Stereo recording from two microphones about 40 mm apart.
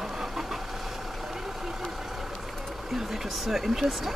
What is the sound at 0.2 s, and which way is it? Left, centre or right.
Vehicle, centre.